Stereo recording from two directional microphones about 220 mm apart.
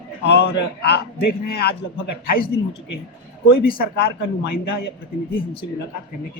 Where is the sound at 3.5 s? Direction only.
45° left (ahead or behind).